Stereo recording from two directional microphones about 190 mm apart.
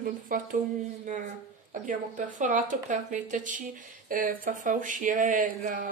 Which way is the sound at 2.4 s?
40° right (ahead or behind).